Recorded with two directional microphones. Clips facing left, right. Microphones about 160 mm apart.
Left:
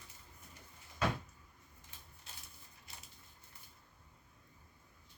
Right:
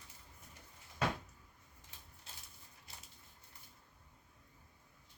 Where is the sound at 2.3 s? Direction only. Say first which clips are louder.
Left 1 dB; 30° right (ahead or behind).